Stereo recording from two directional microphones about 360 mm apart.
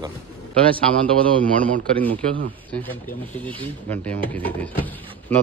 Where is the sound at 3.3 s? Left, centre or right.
Centre.